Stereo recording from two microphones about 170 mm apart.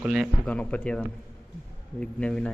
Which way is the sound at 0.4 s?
10° left (ahead or behind).